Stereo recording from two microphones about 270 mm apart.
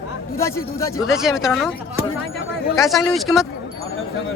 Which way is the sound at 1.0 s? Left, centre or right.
Centre.